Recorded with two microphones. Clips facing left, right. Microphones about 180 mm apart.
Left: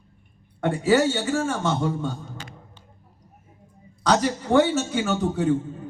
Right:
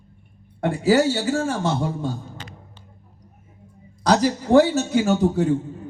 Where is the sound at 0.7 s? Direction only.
35° right (ahead or behind).